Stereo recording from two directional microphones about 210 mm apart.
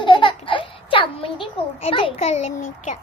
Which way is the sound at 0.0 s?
25° left (ahead or behind).